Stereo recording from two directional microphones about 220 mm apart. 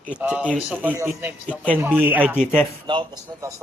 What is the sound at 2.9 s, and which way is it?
Speech, 20° right (ahead or behind).